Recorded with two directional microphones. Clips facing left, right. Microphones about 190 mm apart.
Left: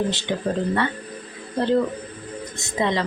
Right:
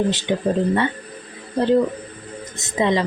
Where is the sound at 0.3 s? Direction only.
15° right (ahead or behind).